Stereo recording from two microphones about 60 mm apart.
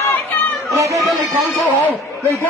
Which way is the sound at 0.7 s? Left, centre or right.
Right.